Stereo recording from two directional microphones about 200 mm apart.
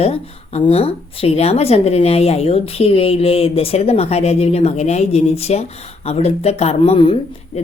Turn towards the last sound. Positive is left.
turn(degrees=25)  # may be behind; listen again after turning